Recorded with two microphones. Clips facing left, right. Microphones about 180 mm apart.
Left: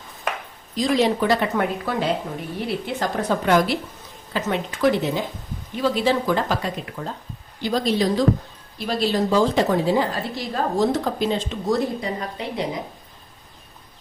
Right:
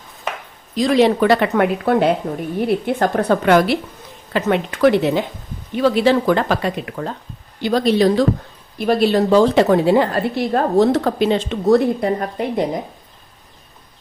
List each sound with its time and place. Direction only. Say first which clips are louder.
0.8 s a woman's voice: right 6 dB; 65° right (ahead or behind); by 12.8 s 50° right (ahead or behind)